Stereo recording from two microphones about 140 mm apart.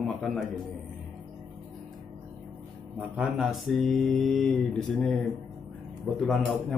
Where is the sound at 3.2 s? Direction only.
Centre (ahead or behind).